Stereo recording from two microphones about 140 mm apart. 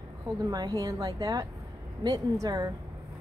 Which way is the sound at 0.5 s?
30° right (ahead or behind).